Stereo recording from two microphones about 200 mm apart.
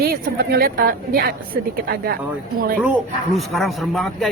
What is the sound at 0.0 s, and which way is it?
A woman's voice, 50° right (ahead or behind).